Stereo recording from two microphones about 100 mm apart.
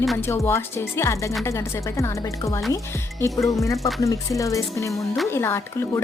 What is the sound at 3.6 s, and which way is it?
Speech, 30° left (ahead or behind).